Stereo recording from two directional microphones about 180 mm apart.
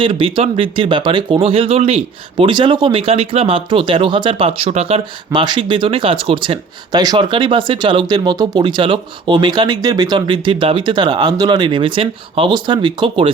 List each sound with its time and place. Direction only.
0.0 s speech: 30° right (ahead or behind)